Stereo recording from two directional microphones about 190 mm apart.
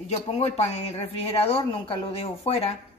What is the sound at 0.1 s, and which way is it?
Speech, 35° left (ahead or behind).